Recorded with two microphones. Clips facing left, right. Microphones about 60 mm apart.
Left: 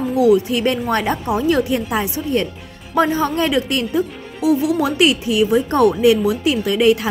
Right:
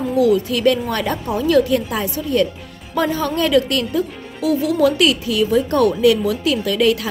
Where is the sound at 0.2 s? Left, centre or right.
Left.